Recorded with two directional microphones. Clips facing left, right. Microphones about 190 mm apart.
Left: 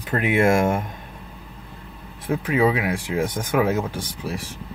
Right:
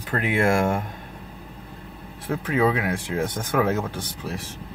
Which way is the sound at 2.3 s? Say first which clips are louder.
Left 2 dB; 10° left (ahead or behind).